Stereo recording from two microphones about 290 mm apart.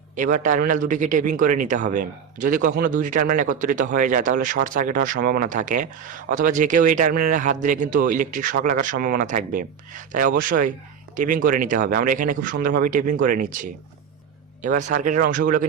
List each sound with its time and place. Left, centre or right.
0.2 s speech: right